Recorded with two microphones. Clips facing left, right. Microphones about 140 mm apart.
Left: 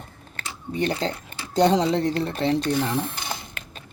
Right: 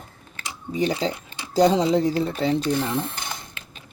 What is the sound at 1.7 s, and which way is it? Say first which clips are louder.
Speech: right 2 dB; 5° right (ahead or behind).